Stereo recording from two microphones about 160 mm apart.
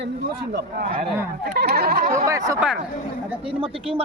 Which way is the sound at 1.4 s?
85° right.